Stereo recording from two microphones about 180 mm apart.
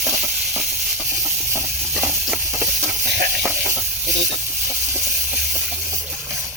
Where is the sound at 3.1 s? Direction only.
70° right (ahead or behind).